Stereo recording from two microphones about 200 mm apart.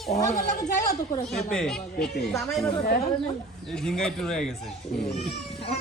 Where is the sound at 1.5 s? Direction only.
5° left (ahead or behind).